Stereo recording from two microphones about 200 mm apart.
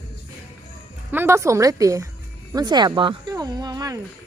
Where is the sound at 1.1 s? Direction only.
10° right (ahead or behind).